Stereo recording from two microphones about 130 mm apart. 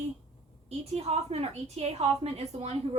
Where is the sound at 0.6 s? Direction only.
55° right (ahead or behind).